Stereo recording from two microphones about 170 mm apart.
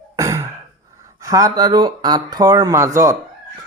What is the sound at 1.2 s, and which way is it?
Speech, 20° right (ahead or behind).